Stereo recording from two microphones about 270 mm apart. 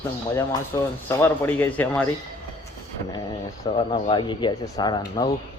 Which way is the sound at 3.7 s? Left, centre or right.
Centre.